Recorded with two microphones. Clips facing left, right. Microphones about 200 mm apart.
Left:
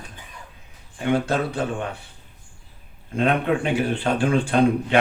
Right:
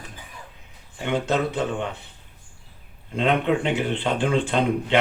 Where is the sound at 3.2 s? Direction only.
20° right (ahead or behind).